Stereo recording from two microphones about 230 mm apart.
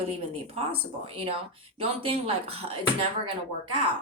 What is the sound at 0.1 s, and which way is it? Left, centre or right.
Speech, right.